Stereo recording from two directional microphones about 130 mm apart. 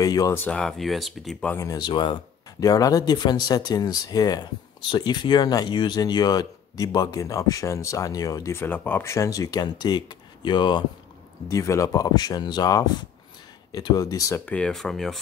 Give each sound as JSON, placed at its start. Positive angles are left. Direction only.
{"t": 0.0, "sound": "speech", "side_deg": 30}
{"t": 0.4, "sound": "speech", "side_deg": 10}
{"t": 1.5, "sound": "speech", "side_deg": 25}
{"t": 11.4, "sound": "speech", "side_deg": 25}
{"t": 14.4, "sound": "speech", "side_deg": 10}